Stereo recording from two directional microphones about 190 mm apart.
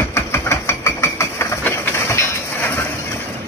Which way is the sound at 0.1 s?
15° left (ahead or behind).